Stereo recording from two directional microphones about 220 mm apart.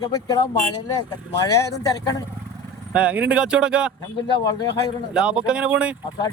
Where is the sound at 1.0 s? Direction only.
15° left (ahead or behind).